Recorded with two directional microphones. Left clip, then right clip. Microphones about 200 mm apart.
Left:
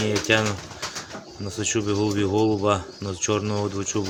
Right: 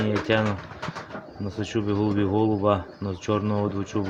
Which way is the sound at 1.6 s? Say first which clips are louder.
Left 2 dB; 5° right (ahead or behind).